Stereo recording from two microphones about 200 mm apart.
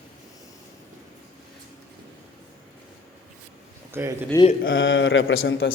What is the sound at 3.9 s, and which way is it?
Speech, 10° right (ahead or behind).